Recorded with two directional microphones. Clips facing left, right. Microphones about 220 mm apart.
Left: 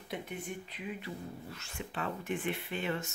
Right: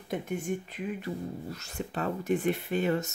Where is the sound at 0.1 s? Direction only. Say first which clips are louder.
Right 8 dB; 45° right (ahead or behind).